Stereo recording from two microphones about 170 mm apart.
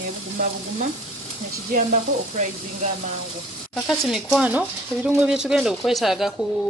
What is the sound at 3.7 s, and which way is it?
Speech, 5° left (ahead or behind).